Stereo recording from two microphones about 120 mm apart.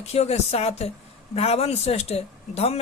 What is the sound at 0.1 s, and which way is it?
Speech, 60° left (ahead or behind).